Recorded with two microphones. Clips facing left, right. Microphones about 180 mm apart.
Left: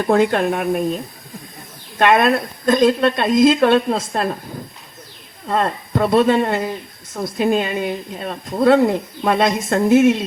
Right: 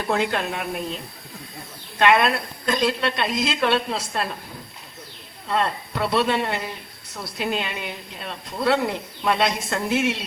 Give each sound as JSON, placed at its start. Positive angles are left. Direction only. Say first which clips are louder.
{"t": 0.1, "sound": "a woman's voice", "louder": "left 8 dB", "side_deg": 50}
{"t": 5.5, "sound": "a woman's voice", "louder": "left 4 dB", "side_deg": 45}